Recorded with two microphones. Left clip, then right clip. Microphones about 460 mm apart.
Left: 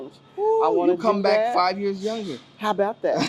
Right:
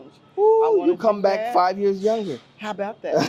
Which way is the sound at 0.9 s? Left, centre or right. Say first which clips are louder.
Even; right.